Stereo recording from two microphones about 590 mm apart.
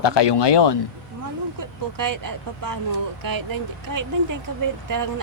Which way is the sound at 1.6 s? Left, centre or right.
Right.